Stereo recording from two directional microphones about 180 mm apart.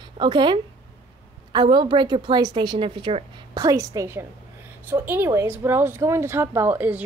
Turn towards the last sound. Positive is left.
turn(degrees=-10)  # may be behind; listen again after turning